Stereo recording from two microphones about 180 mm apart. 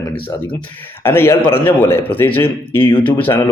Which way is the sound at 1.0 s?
15° left (ahead or behind).